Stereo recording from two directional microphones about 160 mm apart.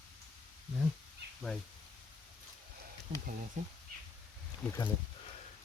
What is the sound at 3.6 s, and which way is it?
Speech, 50° right (ahead or behind).